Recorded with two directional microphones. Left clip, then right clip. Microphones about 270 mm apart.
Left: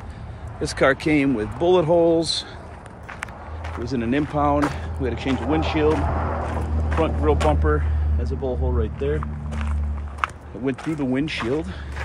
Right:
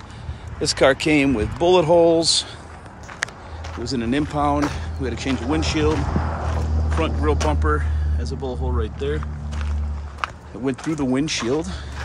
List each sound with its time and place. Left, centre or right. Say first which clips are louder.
0.6 s speech: right 3 dB; centre
3.8 s speech: right 1 dB; centre
6.0 s a sound: left 2 dB; left
7.0 s speech: left 2 dB; centre
10.2 s speech: even; centre